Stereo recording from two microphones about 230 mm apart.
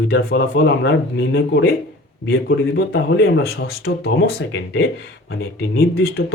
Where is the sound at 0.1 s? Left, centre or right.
Left.